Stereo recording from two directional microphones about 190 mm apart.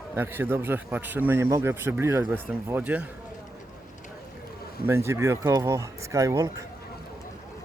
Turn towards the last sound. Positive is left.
turn(degrees=-15)  # may be behind; listen again after turning